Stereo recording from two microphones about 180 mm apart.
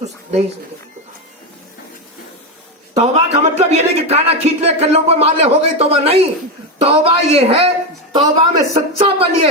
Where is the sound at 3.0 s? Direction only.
40° right (ahead or behind).